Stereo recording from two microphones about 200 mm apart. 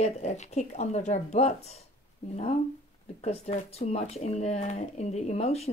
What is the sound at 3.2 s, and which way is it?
Speech, 35° left (ahead or behind).